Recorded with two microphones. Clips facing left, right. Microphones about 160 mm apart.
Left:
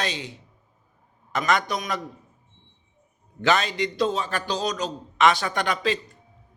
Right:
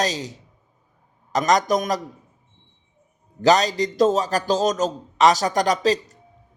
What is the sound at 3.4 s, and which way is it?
A man's voice, 40° right (ahead or behind).